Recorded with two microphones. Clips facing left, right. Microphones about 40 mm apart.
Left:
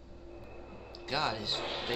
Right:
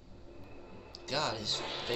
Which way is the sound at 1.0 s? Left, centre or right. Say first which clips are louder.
Left 1 dB; centre.